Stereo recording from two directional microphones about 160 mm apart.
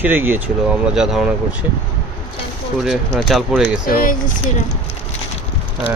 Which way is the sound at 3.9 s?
60° left (ahead or behind).